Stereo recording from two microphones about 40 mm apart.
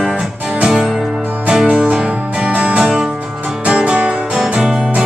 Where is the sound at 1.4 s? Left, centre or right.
Centre.